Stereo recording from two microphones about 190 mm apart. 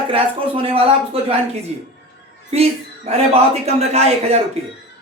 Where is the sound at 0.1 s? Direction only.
30° right (ahead or behind).